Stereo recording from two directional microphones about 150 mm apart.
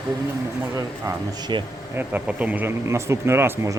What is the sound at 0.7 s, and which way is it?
Speech, 25° right (ahead or behind).